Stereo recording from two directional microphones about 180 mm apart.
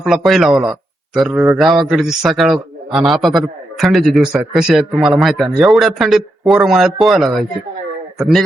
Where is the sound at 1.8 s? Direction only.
Centre (ahead or behind).